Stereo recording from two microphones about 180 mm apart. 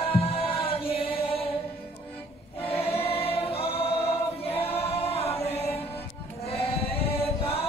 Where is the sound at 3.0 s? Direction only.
30° left (ahead or behind).